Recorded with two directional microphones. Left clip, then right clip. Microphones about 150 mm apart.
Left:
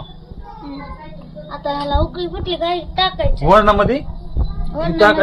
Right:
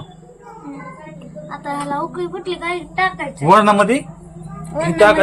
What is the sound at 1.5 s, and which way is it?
A woman's voice, 25° left (ahead or behind).